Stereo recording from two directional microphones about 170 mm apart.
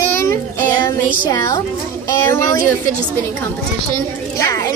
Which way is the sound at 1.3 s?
20° left (ahead or behind).